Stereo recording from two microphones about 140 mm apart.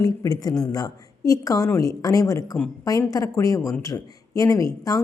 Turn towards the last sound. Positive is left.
turn(degrees=25)  # may be behind; listen again after turning